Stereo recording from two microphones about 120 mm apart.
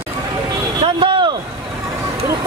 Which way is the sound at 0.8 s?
45° right (ahead or behind).